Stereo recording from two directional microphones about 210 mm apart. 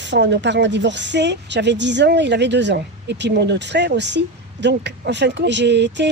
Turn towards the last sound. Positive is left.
turn(degrees=-55)  # may be behind; listen again after turning